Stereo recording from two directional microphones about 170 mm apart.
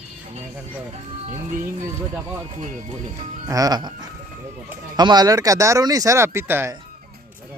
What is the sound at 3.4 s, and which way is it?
Speech, 20° right (ahead or behind).